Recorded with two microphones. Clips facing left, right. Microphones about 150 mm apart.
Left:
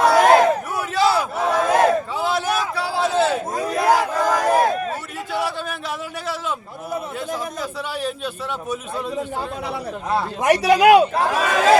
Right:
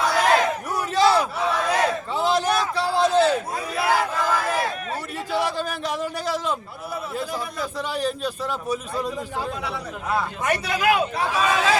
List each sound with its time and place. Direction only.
0.0 s battle cry: 45° left (ahead or behind)
1.0 s battle cry: 5° left (ahead or behind)
1.5 s battle cry: 45° left (ahead or behind)
2.1 s a sound: 5° left (ahead or behind)
3.6 s crowd: 45° left (ahead or behind)
7.2 s a man's voice: centre (ahead or behind)
9.6 s speech: 35° left (ahead or behind)
10.4 s speech: 85° left
11.1 s speech: 45° left (ahead or behind)